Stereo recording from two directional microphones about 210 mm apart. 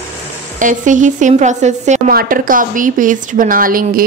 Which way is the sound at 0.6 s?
40° right (ahead or behind).